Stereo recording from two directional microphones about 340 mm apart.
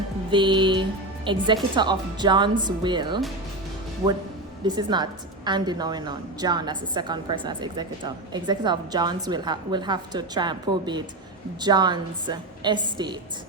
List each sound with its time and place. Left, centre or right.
0.3 s a woman's voice: centre
4.6 s a woman's voice: centre